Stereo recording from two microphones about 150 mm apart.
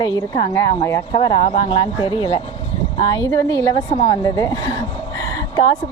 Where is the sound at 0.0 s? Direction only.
30° left (ahead or behind).